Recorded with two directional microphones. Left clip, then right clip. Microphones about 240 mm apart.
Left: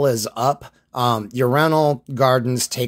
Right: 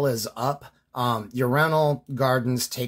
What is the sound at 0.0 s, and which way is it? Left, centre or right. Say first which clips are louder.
Speech: left 7 dB; left.